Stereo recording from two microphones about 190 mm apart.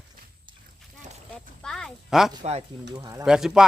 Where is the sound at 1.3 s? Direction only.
5° left (ahead or behind).